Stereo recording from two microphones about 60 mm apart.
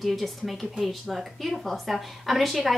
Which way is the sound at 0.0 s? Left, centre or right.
Centre.